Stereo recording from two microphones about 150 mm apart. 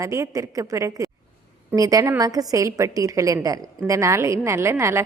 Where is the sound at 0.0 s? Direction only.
20° right (ahead or behind).